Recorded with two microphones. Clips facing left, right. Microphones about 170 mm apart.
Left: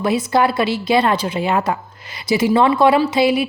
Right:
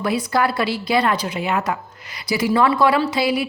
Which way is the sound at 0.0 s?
25° left (ahead or behind).